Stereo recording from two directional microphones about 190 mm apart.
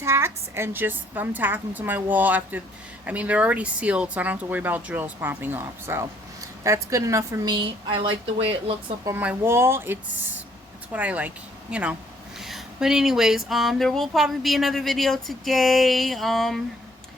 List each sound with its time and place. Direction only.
0.0 s a woman's voice: 15° right (ahead or behind); by 8.7 s 30° right (ahead or behind)
9.0 s speech: 10° right (ahead or behind)